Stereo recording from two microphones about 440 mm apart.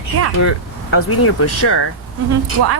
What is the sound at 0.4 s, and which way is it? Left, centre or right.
Speech, left.